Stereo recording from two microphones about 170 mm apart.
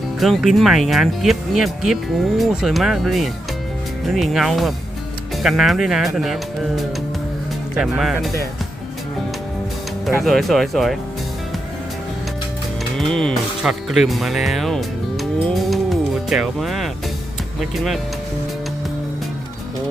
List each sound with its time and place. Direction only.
0.2 s speech: centre (ahead or behind)
7.8 s speech: 5° right (ahead or behind)
10.2 s speech: centre (ahead or behind)
12.8 s speech: centre (ahead or behind)